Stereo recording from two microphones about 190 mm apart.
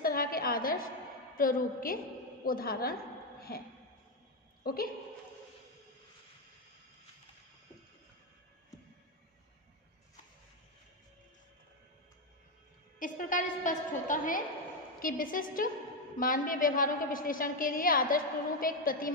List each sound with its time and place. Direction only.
0.0 s a sound: 50° left (ahead or behind)
1.3 s a woman's voice: 50° left (ahead or behind)
13.0 s a woman's voice: 45° left (ahead or behind)